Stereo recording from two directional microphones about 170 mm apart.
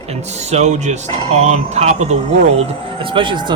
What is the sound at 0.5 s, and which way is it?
Speech, 40° right (ahead or behind).